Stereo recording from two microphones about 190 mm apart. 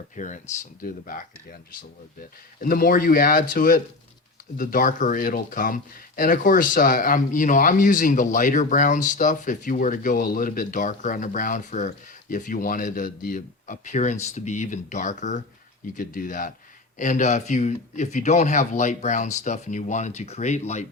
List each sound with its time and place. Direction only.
0.2 s speech: 40° left (ahead or behind)